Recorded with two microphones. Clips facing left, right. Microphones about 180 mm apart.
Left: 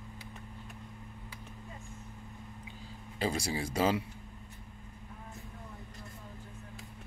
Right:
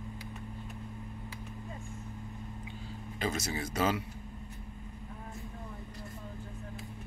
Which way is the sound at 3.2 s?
30° left (ahead or behind).